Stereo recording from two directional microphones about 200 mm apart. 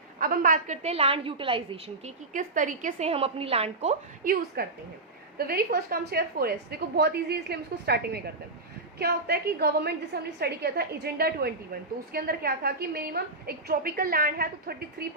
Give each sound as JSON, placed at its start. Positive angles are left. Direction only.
{"t": 0.2, "sound": "a woman's voice", "side_deg": -45}